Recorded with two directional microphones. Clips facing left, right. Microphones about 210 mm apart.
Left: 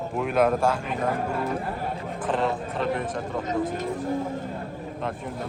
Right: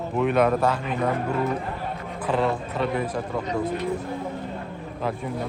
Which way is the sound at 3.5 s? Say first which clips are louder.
Even; 45° left (ahead or behind).